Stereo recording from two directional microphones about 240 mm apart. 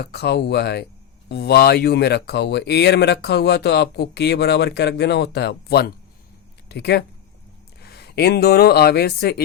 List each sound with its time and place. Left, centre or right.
0.0 s speech: left